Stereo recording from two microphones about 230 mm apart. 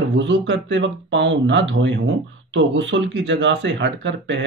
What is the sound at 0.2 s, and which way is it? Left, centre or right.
Speech, right.